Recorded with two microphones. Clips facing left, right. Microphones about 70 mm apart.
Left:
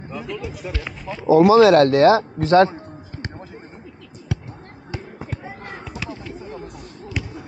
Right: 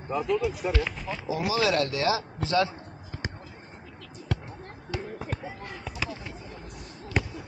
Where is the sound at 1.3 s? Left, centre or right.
Left.